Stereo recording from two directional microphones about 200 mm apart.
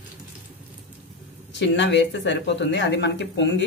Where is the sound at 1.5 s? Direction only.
60° left (ahead or behind).